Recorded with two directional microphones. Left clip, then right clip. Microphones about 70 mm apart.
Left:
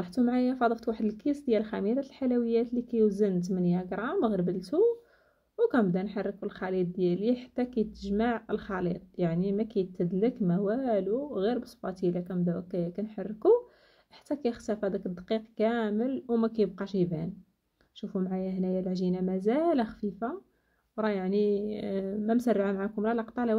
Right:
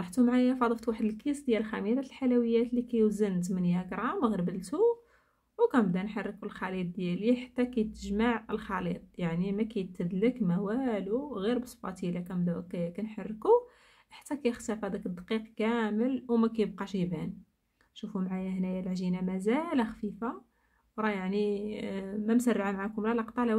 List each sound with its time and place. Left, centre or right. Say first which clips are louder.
0.0 s a woman's voice: right 1 dB; left